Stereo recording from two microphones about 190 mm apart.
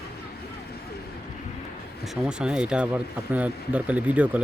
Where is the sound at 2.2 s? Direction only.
5° right (ahead or behind).